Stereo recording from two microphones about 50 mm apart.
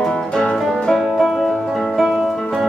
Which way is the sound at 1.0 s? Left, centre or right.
Centre.